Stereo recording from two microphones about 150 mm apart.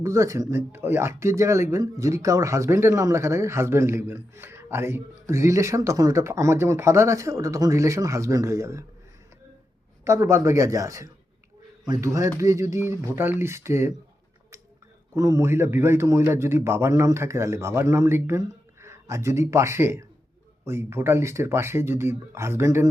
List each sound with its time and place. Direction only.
0.0 s speech: 20° right (ahead or behind)
10.0 s a man's voice: 20° right (ahead or behind)
15.1 s a man's voice: 20° right (ahead or behind)